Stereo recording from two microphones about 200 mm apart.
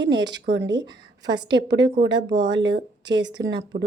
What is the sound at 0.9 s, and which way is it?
Speech, 20° right (ahead or behind).